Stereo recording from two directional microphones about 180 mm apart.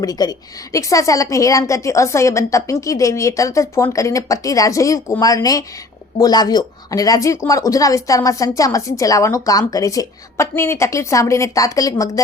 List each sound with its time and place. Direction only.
0.0 s a woman's voice: 20° left (ahead or behind)